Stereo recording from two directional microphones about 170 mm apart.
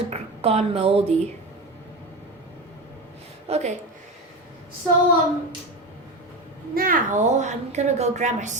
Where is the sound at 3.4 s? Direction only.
40° right (ahead or behind).